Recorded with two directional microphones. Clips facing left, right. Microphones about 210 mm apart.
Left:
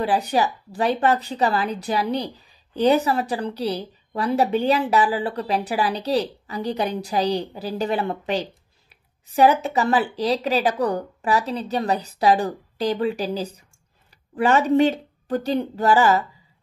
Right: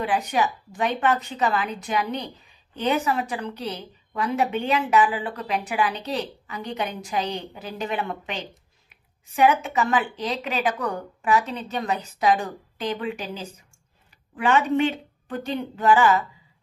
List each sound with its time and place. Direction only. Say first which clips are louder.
0.0 s a woman's voice: left 3 dB; 35° left (ahead or behind)